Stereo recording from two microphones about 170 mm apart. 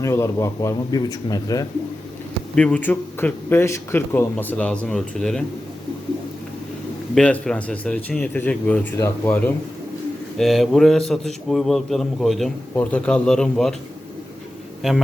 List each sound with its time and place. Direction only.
0.0 s speech: 15° left (ahead or behind)
2.6 s speech: 5° left (ahead or behind)
7.2 s speech: 5° left (ahead or behind)
10.3 s a man's voice: centre (ahead or behind)